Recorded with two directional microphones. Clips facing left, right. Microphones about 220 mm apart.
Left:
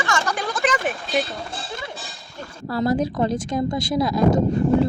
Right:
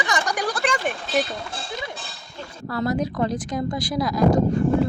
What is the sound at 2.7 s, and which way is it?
Speech, 30° left (ahead or behind).